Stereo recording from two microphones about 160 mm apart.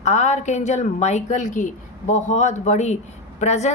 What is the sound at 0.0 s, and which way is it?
A woman's voice, 45° left (ahead or behind).